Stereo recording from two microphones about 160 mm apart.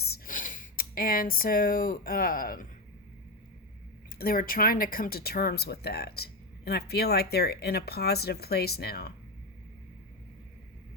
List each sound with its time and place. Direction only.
0.0 s speech: 65° left (ahead or behind)
4.2 s speech: 65° left (ahead or behind)